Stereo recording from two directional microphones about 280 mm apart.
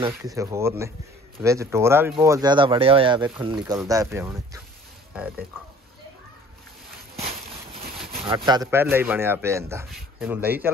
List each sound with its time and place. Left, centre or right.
0.0 s a man's voice: centre
8.3 s a man's voice: centre